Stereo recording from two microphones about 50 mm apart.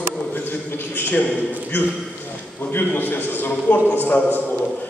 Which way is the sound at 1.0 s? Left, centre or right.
Left.